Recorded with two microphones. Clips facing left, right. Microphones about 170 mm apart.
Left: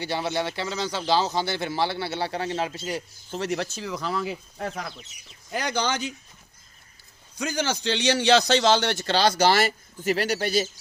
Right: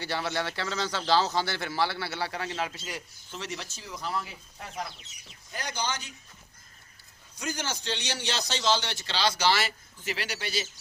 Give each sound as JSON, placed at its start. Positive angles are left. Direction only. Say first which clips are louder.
{"t": 0.0, "sound": "speech", "louder": "left 4 dB", "side_deg": 15}
{"t": 3.4, "sound": "speech", "louder": "left 11 dB", "side_deg": 60}
{"t": 5.5, "sound": "speech", "louder": "left 7 dB", "side_deg": 80}
{"t": 7.3, "sound": "a man's voice", "louder": "left 7 dB", "side_deg": 90}